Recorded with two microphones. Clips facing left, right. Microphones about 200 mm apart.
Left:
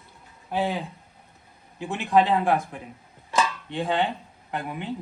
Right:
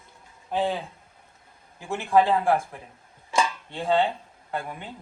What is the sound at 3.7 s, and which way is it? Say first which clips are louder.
Speech: right 3 dB; 15° left (ahead or behind).